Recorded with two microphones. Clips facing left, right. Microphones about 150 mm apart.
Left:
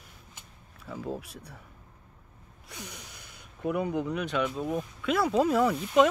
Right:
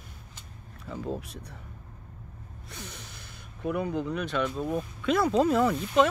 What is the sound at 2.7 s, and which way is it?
Speech, 15° left (ahead or behind).